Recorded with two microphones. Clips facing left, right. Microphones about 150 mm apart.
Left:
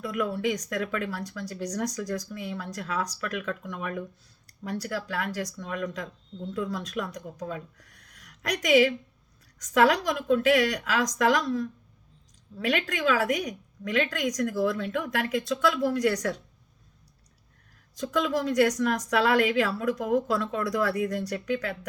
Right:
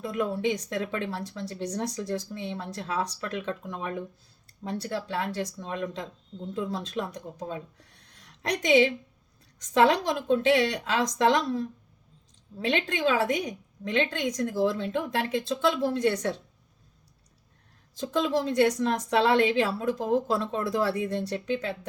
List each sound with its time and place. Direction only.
0.0 s speech: 25° right (ahead or behind)
17.9 s speech: 25° right (ahead or behind)